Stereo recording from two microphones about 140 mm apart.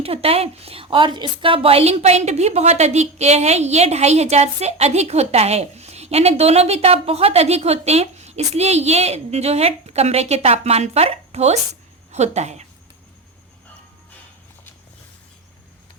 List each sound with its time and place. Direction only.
0.0 s a woman's voice: 45° right (ahead or behind)